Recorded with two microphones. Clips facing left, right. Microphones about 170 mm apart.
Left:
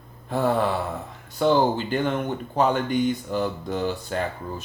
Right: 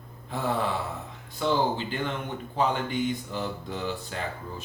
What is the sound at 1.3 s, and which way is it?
Speech, 50° left (ahead or behind).